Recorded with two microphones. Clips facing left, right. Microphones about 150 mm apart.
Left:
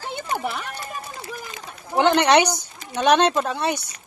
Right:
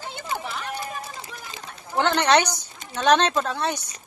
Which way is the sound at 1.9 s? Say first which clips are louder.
Left 3 dB; 15° left (ahead or behind).